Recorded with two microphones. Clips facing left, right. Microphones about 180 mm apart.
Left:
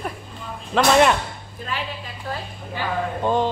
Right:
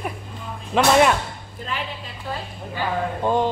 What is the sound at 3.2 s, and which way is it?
Music, 10° right (ahead or behind).